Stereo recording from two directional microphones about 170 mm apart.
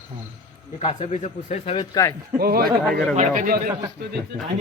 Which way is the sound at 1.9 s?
20° left (ahead or behind).